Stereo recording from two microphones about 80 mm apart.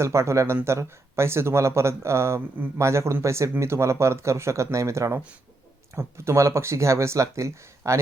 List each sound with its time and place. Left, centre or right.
0.0 s speech: right